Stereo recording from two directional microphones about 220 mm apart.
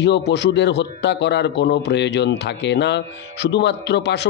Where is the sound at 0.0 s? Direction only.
50° left (ahead or behind).